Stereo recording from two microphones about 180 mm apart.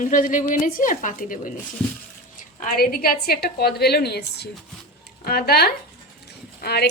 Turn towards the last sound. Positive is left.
turn(degrees=65)  # may be behind; listen again after turning